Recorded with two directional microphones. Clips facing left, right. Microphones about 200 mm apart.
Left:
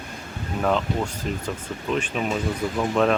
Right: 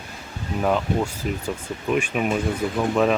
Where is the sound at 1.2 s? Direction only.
10° right (ahead or behind).